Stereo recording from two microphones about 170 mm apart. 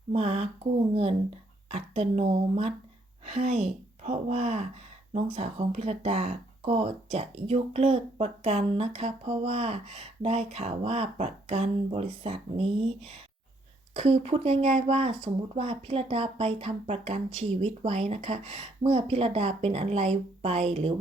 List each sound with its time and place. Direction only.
0.1 s speech: 40° right (ahead or behind)
1.7 s speech: 35° right (ahead or behind)